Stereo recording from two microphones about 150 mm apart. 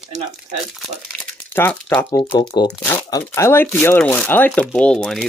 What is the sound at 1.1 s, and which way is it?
Speech, 10° left (ahead or behind).